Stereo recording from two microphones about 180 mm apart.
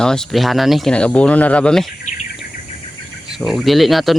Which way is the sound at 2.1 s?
45° left (ahead or behind).